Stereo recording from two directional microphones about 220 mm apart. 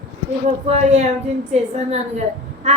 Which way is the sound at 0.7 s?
30° right (ahead or behind).